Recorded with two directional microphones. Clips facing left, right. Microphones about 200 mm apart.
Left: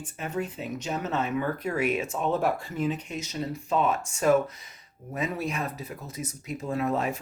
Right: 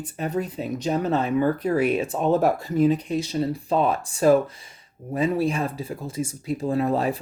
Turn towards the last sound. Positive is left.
turn(degrees=-35)  # may be behind; listen again after turning